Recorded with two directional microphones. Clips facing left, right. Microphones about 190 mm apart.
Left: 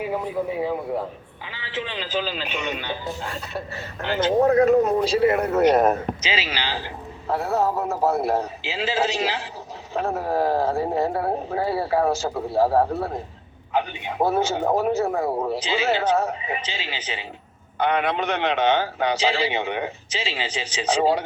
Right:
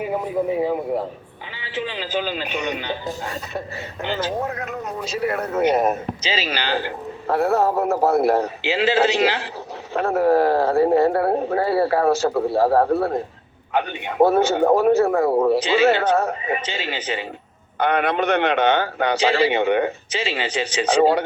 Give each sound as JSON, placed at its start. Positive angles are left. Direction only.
{"t": 4.2, "sound": "speech", "side_deg": 30}
{"t": 5.4, "sound": "speech", "side_deg": 0}
{"t": 6.2, "sound": "a man's voice", "side_deg": -45}